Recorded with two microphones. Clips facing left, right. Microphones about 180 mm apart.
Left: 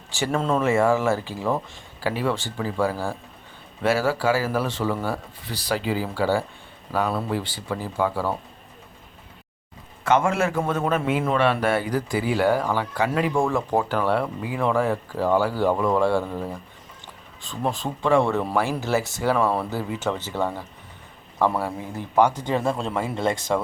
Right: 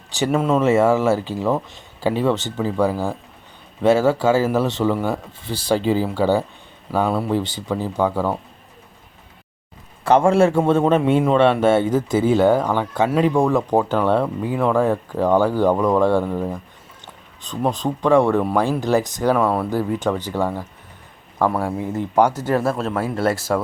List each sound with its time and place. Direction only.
0.1 s speech: 15° right (ahead or behind)
10.0 s speech: 30° right (ahead or behind); by 19.4 s 15° right (ahead or behind)
19.4 s speech: centre (ahead or behind)
20.0 s speech: 15° right (ahead or behind)